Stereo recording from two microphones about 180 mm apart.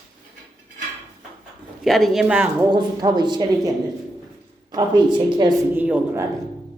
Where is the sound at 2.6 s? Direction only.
25° right (ahead or behind).